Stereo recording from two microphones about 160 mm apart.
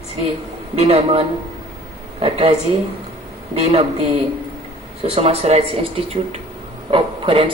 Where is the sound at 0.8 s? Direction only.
40° right (ahead or behind).